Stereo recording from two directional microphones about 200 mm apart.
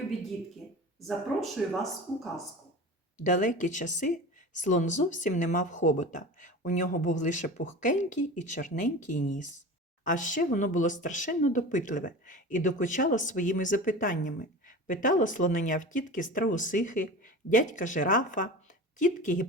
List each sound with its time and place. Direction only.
0.6 s a sound: centre (ahead or behind)
1.0 s speech: centre (ahead or behind)
3.2 s speech: 40° left (ahead or behind)